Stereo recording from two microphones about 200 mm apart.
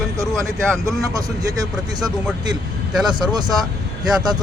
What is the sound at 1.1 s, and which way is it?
Speech, 20° right (ahead or behind).